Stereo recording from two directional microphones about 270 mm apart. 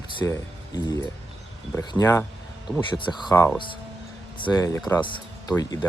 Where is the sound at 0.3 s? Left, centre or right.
Centre.